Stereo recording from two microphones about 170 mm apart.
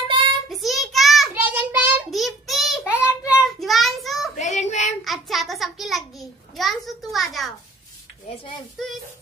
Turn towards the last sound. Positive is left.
turn(degrees=0)  # may be behind; listen again after turning